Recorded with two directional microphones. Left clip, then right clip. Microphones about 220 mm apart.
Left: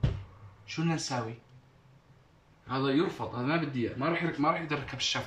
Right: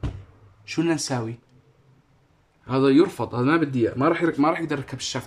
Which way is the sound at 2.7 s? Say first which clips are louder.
Right 10 dB; 40° right (ahead or behind).